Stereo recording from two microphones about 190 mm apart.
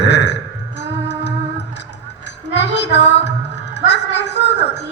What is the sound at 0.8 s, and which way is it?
Music, 65° left (ahead or behind).